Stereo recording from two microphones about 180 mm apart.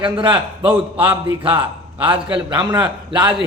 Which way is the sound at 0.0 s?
30° right (ahead or behind).